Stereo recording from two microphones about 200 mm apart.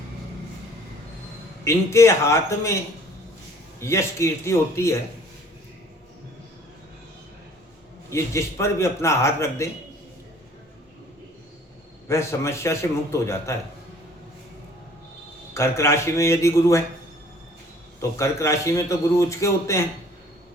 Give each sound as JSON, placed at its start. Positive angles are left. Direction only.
{"t": 1.6, "sound": "a man's voice", "side_deg": 15}
{"t": 3.8, "sound": "a man's voice", "side_deg": 15}
{"t": 8.1, "sound": "a man's voice", "side_deg": 15}
{"t": 12.0, "sound": "a man's voice", "side_deg": 15}
{"t": 15.5, "sound": "a man's voice", "side_deg": 15}
{"t": 18.2, "sound": "a man's voice", "side_deg": 15}